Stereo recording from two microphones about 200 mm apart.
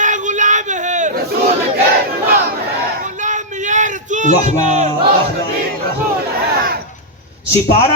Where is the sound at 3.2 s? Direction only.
40° right (ahead or behind).